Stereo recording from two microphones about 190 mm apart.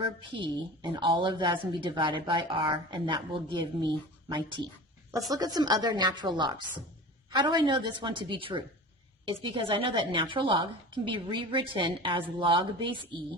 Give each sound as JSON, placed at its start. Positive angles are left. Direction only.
{"t": 0.0, "sound": "a woman's voice", "side_deg": -25}